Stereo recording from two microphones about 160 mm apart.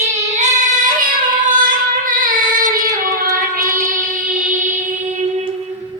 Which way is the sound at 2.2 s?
60° right (ahead or behind).